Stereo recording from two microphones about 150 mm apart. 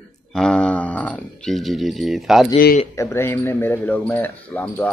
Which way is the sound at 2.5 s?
75° left (ahead or behind).